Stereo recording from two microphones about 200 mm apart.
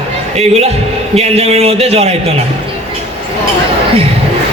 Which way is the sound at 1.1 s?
30° right (ahead or behind).